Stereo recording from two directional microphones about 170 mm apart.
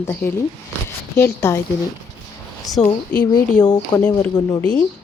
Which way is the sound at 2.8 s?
10° left (ahead or behind).